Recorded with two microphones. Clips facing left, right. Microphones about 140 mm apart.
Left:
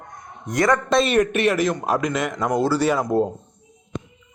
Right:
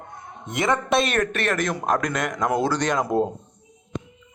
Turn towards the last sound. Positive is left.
turn(degrees=5)  # may be behind; listen again after turning